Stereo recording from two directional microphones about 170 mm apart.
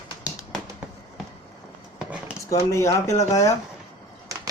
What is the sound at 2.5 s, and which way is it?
Speech, 20° left (ahead or behind).